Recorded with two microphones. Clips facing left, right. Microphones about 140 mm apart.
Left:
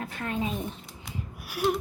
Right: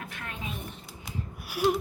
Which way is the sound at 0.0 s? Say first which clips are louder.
Left 8 dB; 35° left (ahead or behind).